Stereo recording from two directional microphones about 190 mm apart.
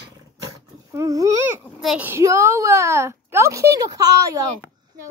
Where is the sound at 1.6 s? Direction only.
Centre (ahead or behind).